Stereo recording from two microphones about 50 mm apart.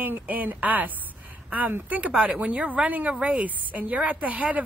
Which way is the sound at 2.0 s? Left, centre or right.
Right.